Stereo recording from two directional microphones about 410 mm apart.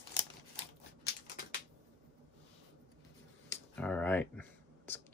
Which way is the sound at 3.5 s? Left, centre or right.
Centre.